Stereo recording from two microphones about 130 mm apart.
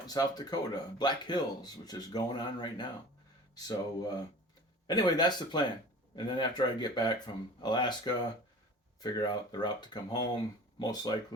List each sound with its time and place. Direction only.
0.1 s speech: 30° left (ahead or behind)